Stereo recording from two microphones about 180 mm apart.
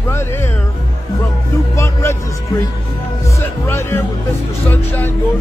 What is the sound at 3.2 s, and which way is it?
Music, 15° left (ahead or behind).